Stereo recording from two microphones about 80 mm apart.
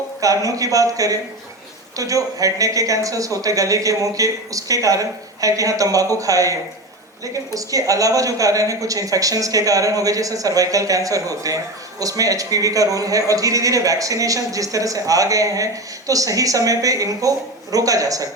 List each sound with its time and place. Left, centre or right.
0.2 s a woman's voice: right